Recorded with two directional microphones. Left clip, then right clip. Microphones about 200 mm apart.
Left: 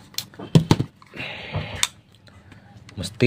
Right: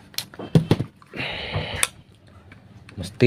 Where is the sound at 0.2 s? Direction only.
15° right (ahead or behind).